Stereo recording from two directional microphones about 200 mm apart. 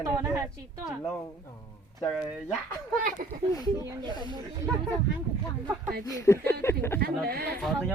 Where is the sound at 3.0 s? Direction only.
45° right (ahead or behind).